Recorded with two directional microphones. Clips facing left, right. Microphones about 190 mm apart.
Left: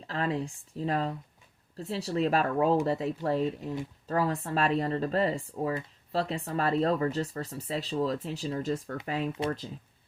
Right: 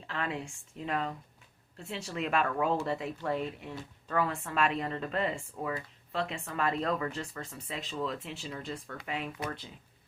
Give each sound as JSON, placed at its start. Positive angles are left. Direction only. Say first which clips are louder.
{"t": 0.1, "sound": "speech", "louder": "left 5 dB", "side_deg": 35}